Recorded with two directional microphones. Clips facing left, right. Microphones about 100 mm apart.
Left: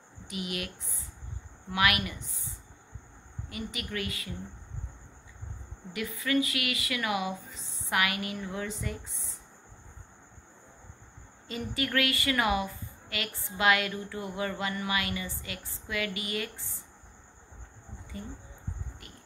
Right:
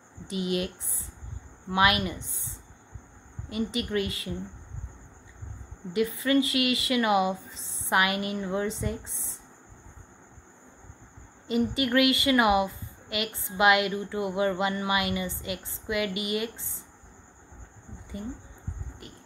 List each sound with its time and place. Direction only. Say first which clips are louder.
0.3 s speech: right 7 dB; 25° right (ahead or behind)
1.7 s speech: right 4 dB; 25° right (ahead or behind)
5.9 s speech: right 5 dB; 25° right (ahead or behind)
11.4 s speech: right 8 dB; 20° right (ahead or behind)